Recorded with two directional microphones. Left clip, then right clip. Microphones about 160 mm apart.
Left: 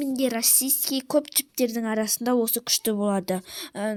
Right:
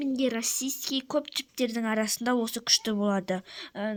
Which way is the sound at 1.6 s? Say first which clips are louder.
Left 3 dB; 10° left (ahead or behind).